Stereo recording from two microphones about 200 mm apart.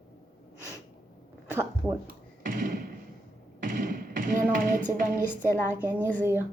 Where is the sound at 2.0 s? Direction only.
45° right (ahead or behind).